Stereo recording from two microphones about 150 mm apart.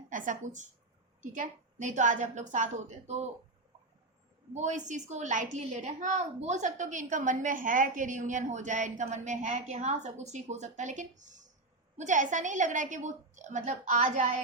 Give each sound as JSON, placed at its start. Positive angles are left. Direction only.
{"t": 0.1, "sound": "a woman's voice", "side_deg": -60}
{"t": 4.5, "sound": "a woman's voice", "side_deg": -50}